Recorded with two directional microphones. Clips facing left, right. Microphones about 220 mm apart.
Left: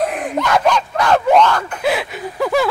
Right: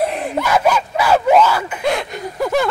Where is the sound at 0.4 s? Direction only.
5° right (ahead or behind).